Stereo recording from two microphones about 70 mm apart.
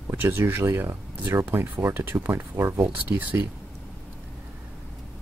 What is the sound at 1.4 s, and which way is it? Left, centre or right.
Speech, right.